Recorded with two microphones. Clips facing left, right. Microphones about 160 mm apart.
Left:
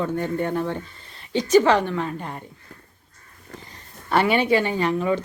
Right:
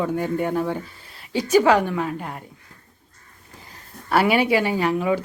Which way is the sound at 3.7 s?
5° right (ahead or behind).